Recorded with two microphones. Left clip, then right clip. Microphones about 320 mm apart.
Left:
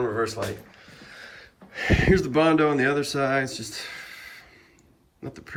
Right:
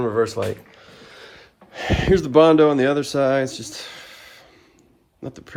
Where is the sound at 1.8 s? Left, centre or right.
Centre.